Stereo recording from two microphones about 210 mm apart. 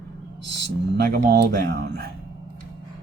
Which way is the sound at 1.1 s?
45° right (ahead or behind).